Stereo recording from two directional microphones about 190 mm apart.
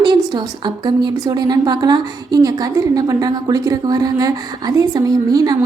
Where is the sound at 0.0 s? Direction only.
25° right (ahead or behind).